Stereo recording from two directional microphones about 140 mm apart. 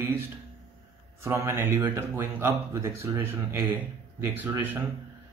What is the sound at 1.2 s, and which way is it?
Speech, 20° right (ahead or behind).